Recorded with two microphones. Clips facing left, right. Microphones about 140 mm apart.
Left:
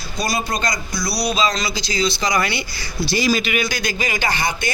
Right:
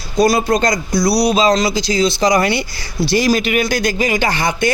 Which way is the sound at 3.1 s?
70° right (ahead or behind).